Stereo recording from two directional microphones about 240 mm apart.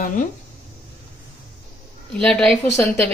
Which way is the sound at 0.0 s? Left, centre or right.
Left.